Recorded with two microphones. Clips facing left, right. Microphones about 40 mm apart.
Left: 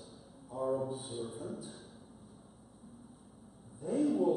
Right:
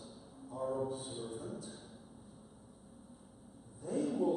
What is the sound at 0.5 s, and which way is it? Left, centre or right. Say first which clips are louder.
A man's voice: left 3 dB; centre.